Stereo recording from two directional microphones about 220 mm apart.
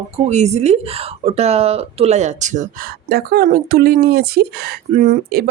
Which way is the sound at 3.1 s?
45° right (ahead or behind).